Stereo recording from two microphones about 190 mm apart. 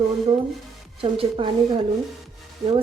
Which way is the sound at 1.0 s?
30° right (ahead or behind).